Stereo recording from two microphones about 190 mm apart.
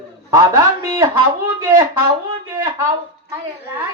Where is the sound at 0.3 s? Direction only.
15° right (ahead or behind).